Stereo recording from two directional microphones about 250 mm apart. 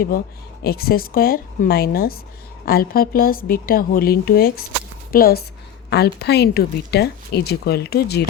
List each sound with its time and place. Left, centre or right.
0.6 s speech: left